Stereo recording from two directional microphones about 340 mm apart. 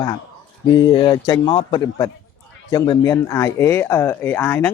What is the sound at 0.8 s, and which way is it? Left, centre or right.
Speech, centre.